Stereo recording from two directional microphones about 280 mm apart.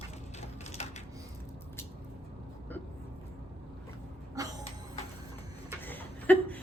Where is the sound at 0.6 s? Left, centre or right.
Left.